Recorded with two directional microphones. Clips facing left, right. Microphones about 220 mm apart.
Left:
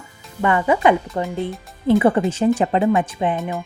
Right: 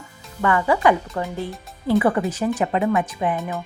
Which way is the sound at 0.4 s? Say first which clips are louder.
Left 2 dB; 20° left (ahead or behind).